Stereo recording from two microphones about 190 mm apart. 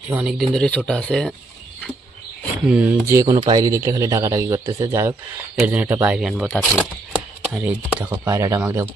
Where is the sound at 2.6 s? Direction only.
5° right (ahead or behind).